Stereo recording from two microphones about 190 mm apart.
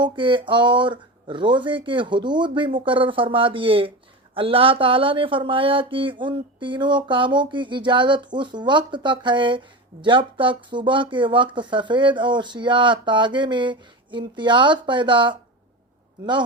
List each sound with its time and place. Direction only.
0.0 s speech: 25° right (ahead or behind)